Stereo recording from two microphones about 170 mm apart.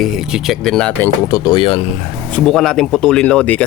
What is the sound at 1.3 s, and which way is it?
Speech, 25° left (ahead or behind).